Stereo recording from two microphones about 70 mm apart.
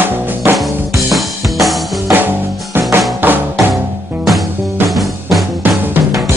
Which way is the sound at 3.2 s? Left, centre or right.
Right.